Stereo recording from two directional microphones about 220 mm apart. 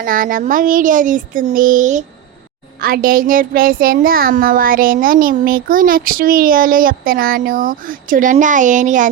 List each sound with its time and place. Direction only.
0.0 s a child's voice: 40° right (ahead or behind)